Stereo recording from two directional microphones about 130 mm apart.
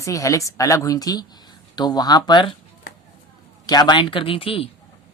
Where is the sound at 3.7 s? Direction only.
35° left (ahead or behind).